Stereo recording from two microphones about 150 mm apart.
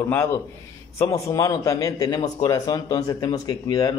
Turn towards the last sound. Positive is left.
turn(degrees=25)  # may be behind; listen again after turning